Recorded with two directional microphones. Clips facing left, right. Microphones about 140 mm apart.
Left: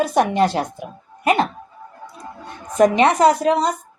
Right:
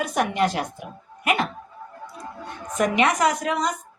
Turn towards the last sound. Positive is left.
turn(degrees=30)  # may be behind; listen again after turning